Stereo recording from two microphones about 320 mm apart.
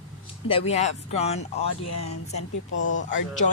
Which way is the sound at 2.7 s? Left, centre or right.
Left.